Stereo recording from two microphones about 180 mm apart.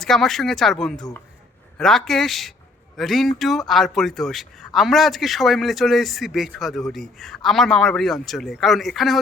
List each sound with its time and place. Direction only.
0.0 s speech: centre (ahead or behind)